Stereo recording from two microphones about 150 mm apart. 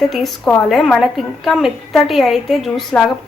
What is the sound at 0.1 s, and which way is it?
A woman's voice, centre (ahead or behind).